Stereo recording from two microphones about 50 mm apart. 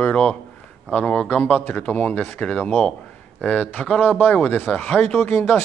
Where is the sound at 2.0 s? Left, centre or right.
Left.